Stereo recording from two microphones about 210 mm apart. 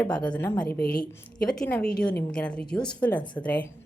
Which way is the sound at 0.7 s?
45° left (ahead or behind).